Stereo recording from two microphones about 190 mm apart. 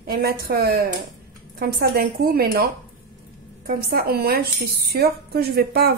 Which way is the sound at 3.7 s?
50° right (ahead or behind).